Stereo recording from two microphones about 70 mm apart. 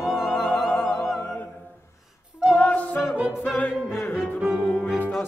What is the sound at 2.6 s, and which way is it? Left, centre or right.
Yodeling, left.